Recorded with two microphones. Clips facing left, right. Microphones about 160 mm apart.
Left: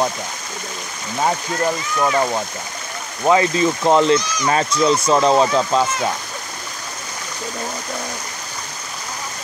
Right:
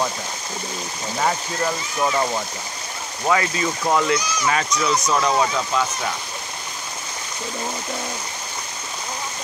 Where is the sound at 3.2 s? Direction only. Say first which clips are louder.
Left 6 dB; 25° left (ahead or behind).